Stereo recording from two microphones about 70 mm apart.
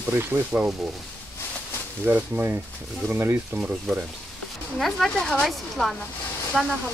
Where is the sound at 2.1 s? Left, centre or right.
Right.